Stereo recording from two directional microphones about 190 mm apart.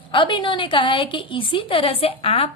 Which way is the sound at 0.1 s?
25° left (ahead or behind).